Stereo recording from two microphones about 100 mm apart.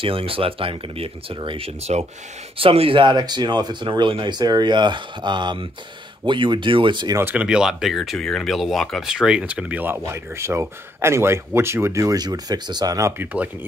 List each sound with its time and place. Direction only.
0.0 s speech: 65° right (ahead or behind); by 2.0 s 90° right
2.5 s speech: 70° right (ahead or behind); by 7.2 s 50° right (ahead or behind)
7.3 s speech: 10° right (ahead or behind)
10.1 s speech: 25° right (ahead or behind)
13.2 s speech: 15° right (ahead or behind)